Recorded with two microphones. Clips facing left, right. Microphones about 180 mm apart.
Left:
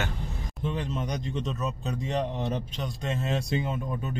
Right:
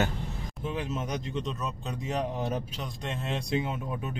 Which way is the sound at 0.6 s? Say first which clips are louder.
Left 2 dB; 5° right (ahead or behind).